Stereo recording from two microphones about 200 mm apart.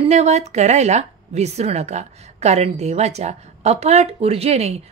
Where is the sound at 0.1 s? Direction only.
35° right (ahead or behind).